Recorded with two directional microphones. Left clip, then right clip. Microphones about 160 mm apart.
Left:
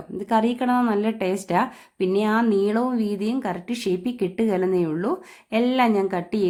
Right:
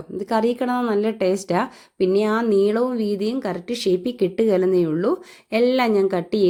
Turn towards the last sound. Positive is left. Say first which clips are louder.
# right 4 dB
turn(degrees=-20)  # may be behind; listen again after turning